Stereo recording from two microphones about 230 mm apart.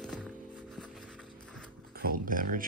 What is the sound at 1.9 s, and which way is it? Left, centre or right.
Dog, right.